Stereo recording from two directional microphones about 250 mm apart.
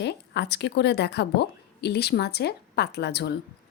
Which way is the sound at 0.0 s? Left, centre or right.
Left.